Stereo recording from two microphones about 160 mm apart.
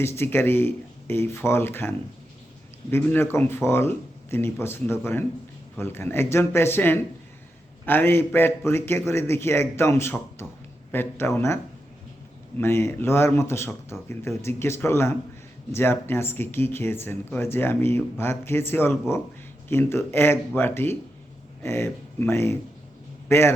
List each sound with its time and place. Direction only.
0.0 s speech: 15° left (ahead or behind)